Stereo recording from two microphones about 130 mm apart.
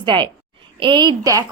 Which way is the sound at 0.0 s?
40° right (ahead or behind).